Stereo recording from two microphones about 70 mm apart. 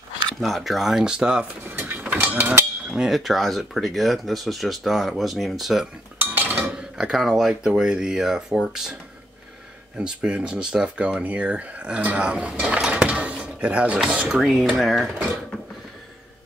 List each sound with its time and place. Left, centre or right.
0.4 s speech: centre
1.7 s mechanisms: right
2.9 s speech: centre
6.1 s cutlery: right
7.0 s speech: centre
9.9 s speech: centre
12.8 s drawer open or close: centre
14.4 s speech: centre